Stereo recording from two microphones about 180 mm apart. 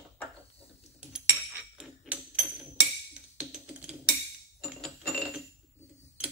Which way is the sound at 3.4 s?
5° right (ahead or behind).